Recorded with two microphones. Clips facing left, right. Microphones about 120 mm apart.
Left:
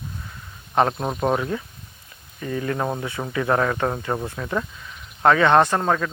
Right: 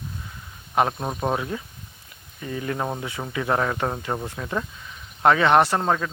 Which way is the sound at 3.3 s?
20° right (ahead or behind).